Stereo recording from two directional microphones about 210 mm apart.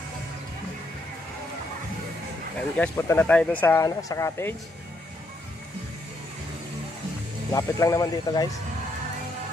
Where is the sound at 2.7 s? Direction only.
5° left (ahead or behind).